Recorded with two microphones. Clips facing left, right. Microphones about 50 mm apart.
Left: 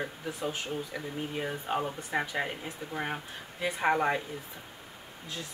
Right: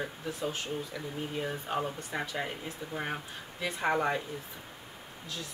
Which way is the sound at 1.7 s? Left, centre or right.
Left.